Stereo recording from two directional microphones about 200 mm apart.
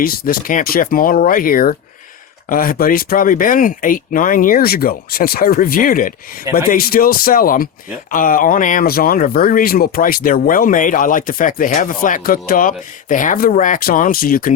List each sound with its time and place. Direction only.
0.0 s speech: 45° left (ahead or behind)